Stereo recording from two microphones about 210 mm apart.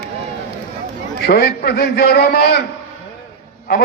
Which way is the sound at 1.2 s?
50° left (ahead or behind).